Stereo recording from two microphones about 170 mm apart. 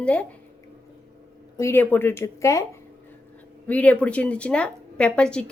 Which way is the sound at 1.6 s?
15° left (ahead or behind).